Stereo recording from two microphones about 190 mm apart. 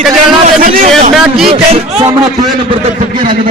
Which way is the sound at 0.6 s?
45° right (ahead or behind).